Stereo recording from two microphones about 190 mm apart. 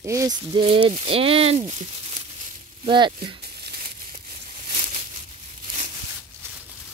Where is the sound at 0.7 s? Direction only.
30° right (ahead or behind).